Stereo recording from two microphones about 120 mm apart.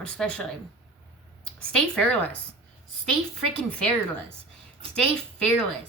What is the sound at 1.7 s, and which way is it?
Speech, 5° left (ahead or behind).